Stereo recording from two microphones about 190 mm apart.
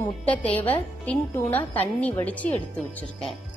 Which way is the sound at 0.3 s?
5° left (ahead or behind).